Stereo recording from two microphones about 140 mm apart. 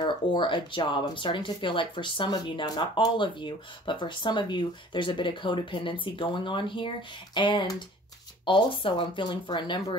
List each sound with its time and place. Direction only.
0.0 s speech: 35° left (ahead or behind)